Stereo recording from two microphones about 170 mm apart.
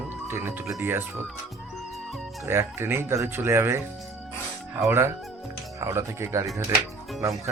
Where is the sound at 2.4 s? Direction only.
15° right (ahead or behind).